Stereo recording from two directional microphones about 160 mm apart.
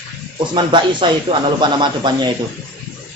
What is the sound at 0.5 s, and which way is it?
A man's voice, 30° right (ahead or behind).